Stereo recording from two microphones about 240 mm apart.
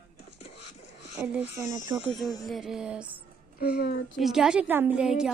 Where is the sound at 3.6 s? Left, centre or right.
Left.